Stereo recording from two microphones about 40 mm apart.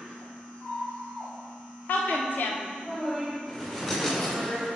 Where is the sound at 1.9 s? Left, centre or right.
Left.